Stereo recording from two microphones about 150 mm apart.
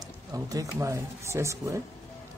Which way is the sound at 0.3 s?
25° right (ahead or behind).